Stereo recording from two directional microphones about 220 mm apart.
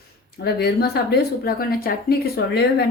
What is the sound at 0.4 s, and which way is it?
Speech, 45° left (ahead or behind).